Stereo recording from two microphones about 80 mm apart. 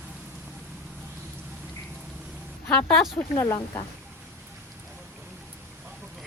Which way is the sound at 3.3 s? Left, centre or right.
Left.